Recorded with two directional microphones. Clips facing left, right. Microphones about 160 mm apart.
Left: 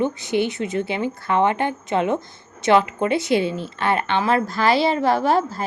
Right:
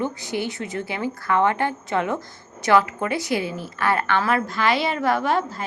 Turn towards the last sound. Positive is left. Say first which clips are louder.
# left 3 dB
turn(degrees=35)  # may be behind; listen again after turning